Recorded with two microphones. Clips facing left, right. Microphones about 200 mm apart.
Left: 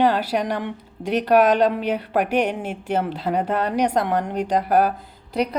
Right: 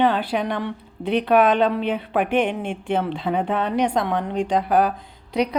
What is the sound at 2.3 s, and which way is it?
Speech, 40° left (ahead or behind).